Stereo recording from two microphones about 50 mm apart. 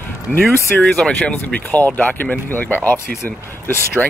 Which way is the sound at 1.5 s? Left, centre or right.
Left.